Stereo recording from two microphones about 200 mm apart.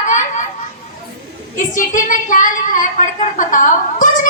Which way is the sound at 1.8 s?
40° left (ahead or behind).